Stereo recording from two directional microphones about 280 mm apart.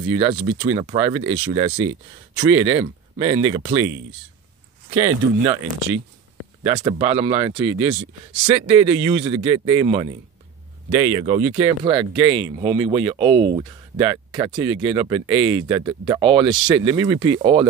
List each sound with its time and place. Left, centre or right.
0.1 s speech: centre
4.9 s speech: centre
6.6 s speech: right